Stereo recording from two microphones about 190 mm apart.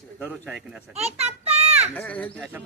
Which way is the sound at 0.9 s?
35° right (ahead or behind).